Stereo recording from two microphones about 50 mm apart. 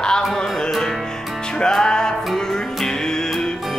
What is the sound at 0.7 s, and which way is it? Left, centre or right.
Music, centre.